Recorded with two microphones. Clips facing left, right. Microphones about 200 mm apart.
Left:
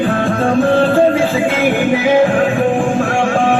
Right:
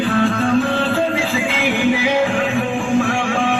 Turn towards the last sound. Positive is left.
turn(degrees=50)  # may be behind; listen again after turning